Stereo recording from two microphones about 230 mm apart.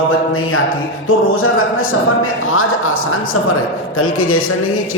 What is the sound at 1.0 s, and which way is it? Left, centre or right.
Music, left.